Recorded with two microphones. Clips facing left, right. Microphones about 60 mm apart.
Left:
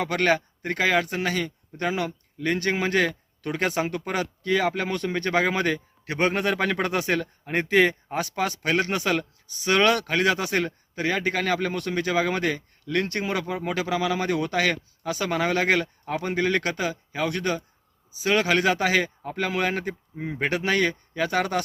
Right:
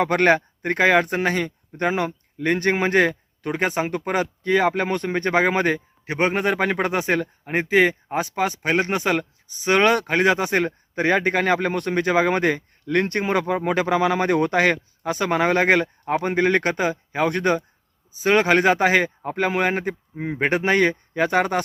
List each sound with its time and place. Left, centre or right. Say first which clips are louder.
0.0 s speech: right 5 dB; right